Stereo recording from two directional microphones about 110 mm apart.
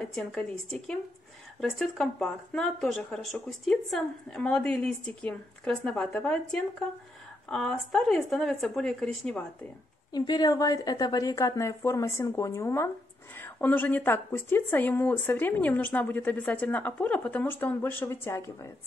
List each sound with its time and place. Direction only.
0.0 s a woman's voice: 5° left (ahead or behind)
10.1 s a woman's voice: 40° left (ahead or behind)